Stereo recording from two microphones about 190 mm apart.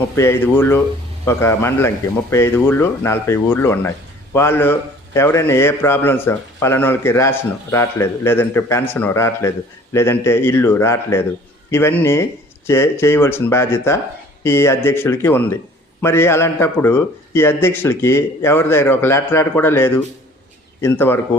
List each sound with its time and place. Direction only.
0.2 s a man's voice: 15° left (ahead or behind)